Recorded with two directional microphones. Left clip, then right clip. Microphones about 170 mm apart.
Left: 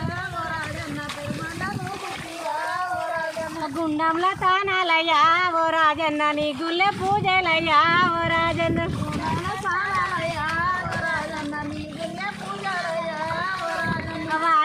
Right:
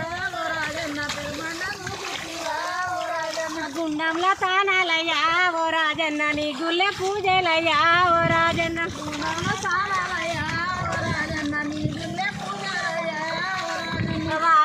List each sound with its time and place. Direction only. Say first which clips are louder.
3.9 s speech: even; 25° left (ahead or behind)